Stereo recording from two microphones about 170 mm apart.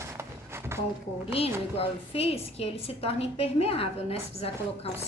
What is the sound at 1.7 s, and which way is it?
A woman's voice, 35° left (ahead or behind).